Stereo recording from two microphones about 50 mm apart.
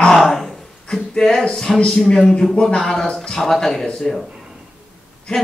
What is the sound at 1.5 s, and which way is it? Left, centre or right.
Speech, centre.